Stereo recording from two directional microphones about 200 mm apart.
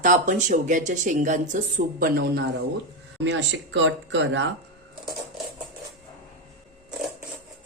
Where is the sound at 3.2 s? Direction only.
60° right (ahead or behind).